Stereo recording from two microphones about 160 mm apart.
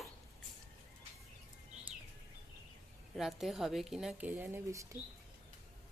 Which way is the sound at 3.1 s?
Centre (ahead or behind).